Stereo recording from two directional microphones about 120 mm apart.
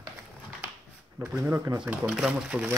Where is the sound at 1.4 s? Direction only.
25° right (ahead or behind).